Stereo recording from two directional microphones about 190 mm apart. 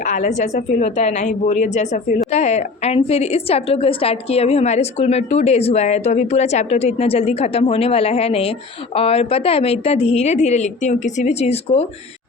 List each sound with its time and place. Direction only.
0.0 s a woman's voice: 40° left (ahead or behind)